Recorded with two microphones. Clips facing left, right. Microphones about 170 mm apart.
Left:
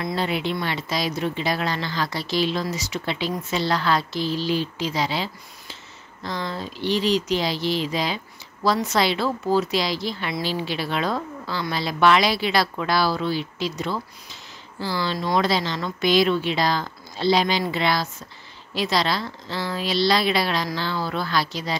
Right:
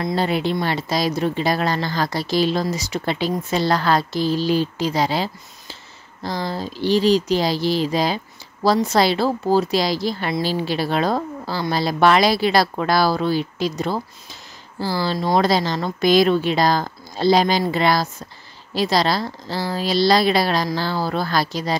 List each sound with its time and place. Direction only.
0.0 s a woman's voice: 40° right (ahead or behind)